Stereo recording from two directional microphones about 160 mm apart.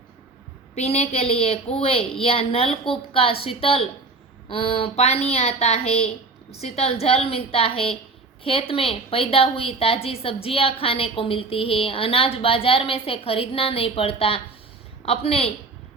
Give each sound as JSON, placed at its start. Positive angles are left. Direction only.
{"t": 0.8, "sound": "a woman's voice", "side_deg": 40}